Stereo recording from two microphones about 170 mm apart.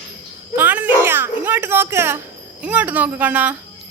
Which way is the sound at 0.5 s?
10° right (ahead or behind).